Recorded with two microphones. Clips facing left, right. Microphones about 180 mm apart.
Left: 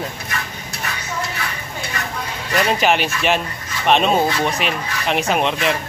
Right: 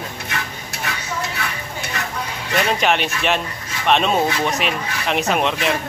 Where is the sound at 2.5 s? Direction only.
5° left (ahead or behind).